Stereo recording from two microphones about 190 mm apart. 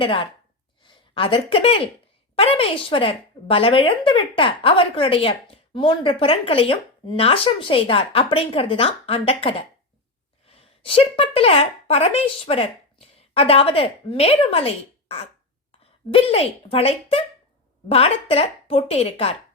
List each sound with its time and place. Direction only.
0.0 s speech: 30° left (ahead or behind)